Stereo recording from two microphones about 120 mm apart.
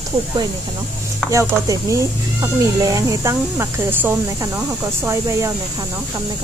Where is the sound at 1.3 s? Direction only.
25° right (ahead or behind).